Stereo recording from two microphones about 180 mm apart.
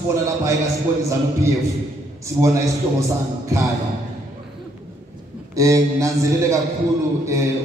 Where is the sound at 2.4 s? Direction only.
15° right (ahead or behind).